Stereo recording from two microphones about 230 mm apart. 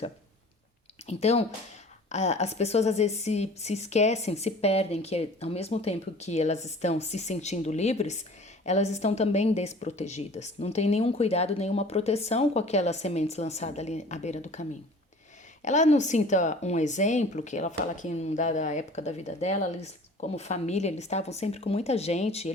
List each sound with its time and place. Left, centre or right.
1.0 s a woman's voice: left